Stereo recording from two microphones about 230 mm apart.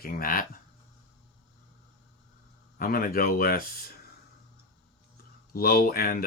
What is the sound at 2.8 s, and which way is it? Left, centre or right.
Speech, left.